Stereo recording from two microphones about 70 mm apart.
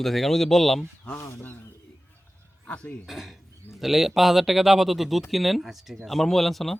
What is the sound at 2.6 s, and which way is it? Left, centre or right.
Speech, centre.